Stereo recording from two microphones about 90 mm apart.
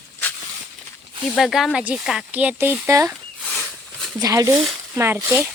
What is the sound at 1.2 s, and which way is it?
Speech, centre (ahead or behind).